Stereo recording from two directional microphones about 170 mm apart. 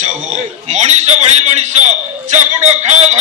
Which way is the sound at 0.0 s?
45° right (ahead or behind).